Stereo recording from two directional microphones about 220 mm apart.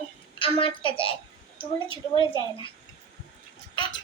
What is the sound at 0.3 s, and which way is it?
Speech, 25° left (ahead or behind).